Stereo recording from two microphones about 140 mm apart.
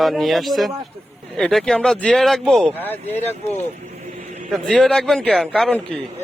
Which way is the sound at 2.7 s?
15° left (ahead or behind).